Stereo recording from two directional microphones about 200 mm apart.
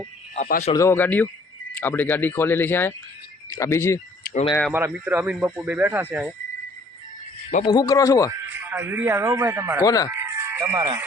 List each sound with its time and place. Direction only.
0.3 s speech: 40° left (ahead or behind)
0.7 s speech: 15° left (ahead or behind)
4.7 s speech: 10° right (ahead or behind)
7.6 s speech: 20° left (ahead or behind)
8.3 s speech: 10° right (ahead or behind)
9.8 s speech: 20° left (ahead or behind)
10.1 s music: 10° right (ahead or behind)